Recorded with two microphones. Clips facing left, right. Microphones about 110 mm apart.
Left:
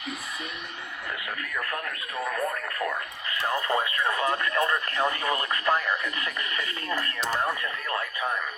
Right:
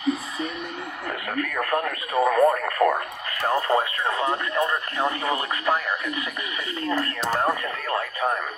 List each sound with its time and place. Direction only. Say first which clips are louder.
1.4 s speech: right 12 dB; 60° right (ahead or behind)
3.4 s speech: right 5 dB; 35° right (ahead or behind); by 6.2 s 15° right (ahead or behind)
6.8 s speech: right 7 dB; 30° right (ahead or behind)
7.2 s speech: right 3 dB; 40° right (ahead or behind)